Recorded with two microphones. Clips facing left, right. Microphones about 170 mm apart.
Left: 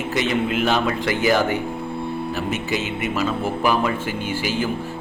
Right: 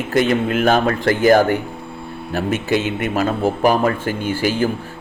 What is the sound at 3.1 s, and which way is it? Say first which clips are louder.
A man's voice: right 4 dB; 50° right (ahead or behind).